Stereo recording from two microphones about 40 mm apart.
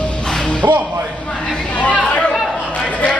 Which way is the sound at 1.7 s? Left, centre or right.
Left.